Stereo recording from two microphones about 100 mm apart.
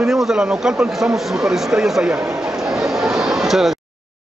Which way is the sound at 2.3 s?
5° right (ahead or behind).